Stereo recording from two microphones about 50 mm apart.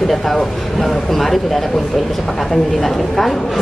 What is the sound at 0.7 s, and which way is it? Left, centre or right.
Speech, centre.